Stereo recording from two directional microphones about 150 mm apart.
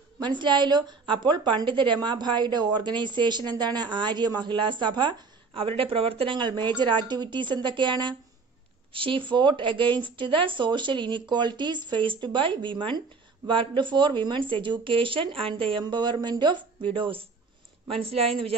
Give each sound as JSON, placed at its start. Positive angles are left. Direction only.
{"t": 0.2, "sound": "a woman's voice", "side_deg": -30}